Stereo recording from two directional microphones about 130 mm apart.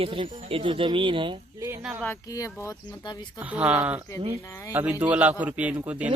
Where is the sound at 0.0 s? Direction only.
45° right (ahead or behind).